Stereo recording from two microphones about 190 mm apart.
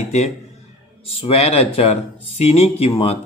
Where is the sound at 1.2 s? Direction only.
35° left (ahead or behind).